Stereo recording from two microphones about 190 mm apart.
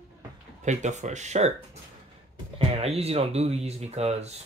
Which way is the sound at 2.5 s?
30° right (ahead or behind).